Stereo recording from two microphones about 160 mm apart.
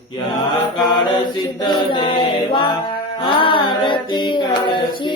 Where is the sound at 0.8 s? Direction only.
30° left (ahead or behind).